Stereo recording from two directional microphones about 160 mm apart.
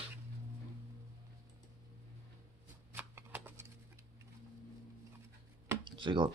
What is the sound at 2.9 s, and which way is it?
Shuffling cards, 15° right (ahead or behind).